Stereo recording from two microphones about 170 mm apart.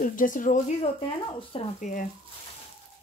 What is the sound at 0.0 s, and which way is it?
Speech, 50° left (ahead or behind).